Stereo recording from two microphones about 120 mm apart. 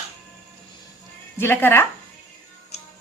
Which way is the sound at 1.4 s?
20° left (ahead or behind).